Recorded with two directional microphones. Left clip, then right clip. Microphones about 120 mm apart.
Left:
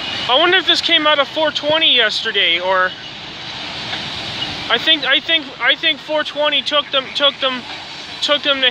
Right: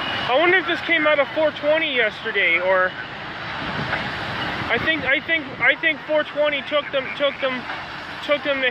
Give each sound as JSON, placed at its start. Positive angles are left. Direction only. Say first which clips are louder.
{"t": 0.3, "sound": "speech", "louder": "left 5 dB", "side_deg": 55}
{"t": 4.6, "sound": "speech", "louder": "left 6 dB", "side_deg": 55}